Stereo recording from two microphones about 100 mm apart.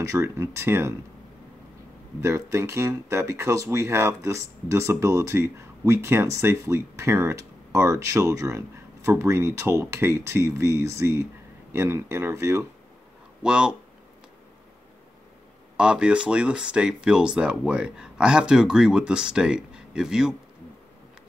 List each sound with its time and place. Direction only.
0.0 s speech: 30° right (ahead or behind)
2.2 s speech: 30° right (ahead or behind)
13.4 s speech: 10° right (ahead or behind)
15.8 s speech: 10° right (ahead or behind)